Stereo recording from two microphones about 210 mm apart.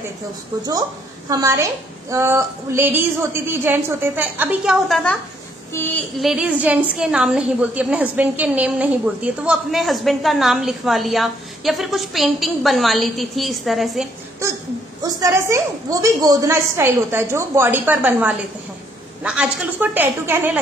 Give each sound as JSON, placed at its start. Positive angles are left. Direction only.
{"t": 1.3, "sound": "a woman's voice", "side_deg": -15}
{"t": 15.1, "sound": "a woman's voice", "side_deg": -15}